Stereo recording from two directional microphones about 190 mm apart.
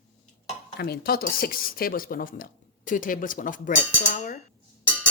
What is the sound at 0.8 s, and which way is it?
Speech, 55° left (ahead or behind).